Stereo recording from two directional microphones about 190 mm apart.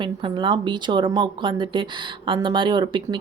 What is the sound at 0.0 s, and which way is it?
Speech, 25° right (ahead or behind).